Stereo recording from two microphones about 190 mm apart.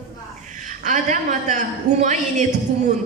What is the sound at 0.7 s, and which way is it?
A woman's voice, 40° right (ahead or behind).